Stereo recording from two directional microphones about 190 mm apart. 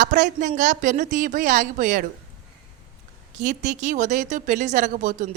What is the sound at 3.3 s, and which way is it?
A woman's voice, 40° right (ahead or behind).